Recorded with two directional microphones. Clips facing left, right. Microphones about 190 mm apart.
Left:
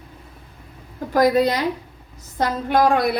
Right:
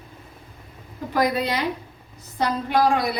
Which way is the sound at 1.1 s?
40° left (ahead or behind).